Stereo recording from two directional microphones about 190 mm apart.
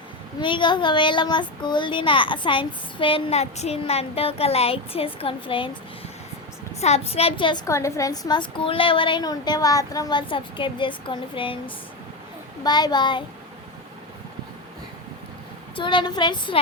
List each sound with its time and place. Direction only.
0.3 s a child's voice: 25° left (ahead or behind)
6.7 s a child's voice: 35° left (ahead or behind)
15.7 s a child's voice: 25° left (ahead or behind)